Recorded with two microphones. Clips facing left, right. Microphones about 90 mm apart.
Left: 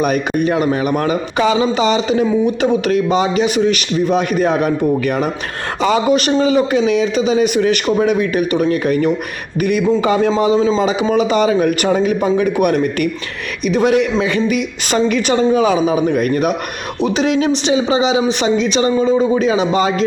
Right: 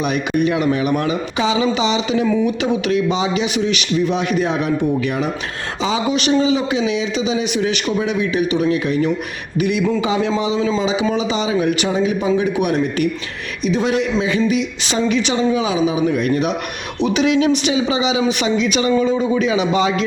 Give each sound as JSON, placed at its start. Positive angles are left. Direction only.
{"t": 0.0, "sound": "a man's voice", "side_deg": 40}